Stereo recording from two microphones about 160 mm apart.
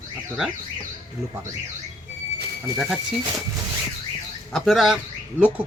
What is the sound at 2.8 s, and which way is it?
Speech, 5° right (ahead or behind).